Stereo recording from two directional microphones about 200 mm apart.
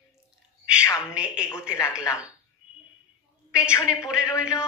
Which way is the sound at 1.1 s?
5° right (ahead or behind).